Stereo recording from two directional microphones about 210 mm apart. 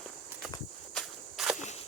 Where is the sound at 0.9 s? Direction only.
Centre (ahead or behind).